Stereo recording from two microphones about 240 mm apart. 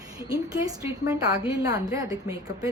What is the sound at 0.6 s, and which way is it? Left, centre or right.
A woman's voice, centre.